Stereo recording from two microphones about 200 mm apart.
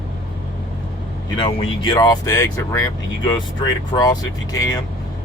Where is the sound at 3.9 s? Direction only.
25° left (ahead or behind).